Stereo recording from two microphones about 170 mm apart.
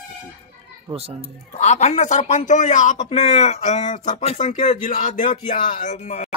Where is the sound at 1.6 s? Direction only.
45° left (ahead or behind).